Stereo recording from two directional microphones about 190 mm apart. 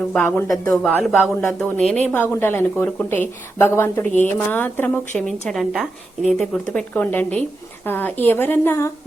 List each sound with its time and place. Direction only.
0.1 s a woman's voice: 5° left (ahead or behind)